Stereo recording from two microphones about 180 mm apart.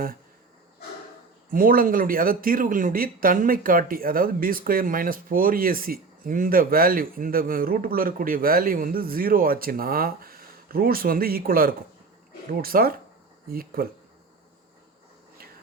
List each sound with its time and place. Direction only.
1.5 s speech: 50° right (ahead or behind)